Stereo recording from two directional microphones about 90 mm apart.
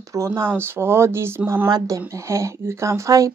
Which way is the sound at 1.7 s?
40° right (ahead or behind).